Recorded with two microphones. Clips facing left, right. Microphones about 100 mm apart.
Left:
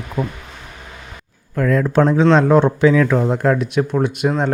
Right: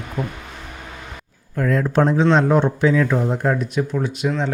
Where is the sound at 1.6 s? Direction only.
90° left.